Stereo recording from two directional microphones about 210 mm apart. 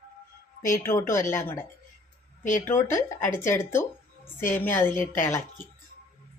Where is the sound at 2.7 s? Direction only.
15° left (ahead or behind).